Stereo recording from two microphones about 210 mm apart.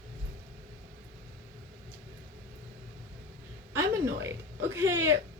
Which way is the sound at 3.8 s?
15° right (ahead or behind).